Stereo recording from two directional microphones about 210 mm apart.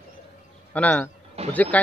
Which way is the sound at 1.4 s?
30° right (ahead or behind).